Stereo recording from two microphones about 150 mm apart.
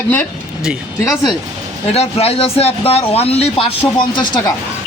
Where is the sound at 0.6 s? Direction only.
5° right (ahead or behind).